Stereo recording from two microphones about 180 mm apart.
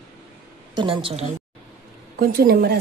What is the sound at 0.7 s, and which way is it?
Speech, 25° right (ahead or behind).